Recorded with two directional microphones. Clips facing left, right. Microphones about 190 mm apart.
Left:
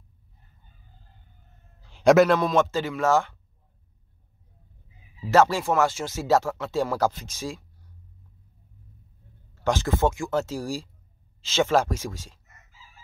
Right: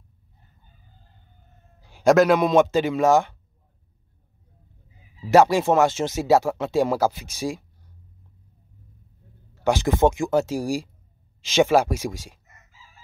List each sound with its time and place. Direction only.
1.8 s cat: 10° right (ahead or behind)
2.0 s a man's voice: centre (ahead or behind)
2.3 s speech: 15° right (ahead or behind)
5.3 s speech: 15° right (ahead or behind)
9.6 s speech: 15° right (ahead or behind)